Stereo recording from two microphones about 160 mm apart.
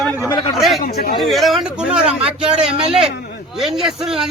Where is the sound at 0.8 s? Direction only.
70° left (ahead or behind).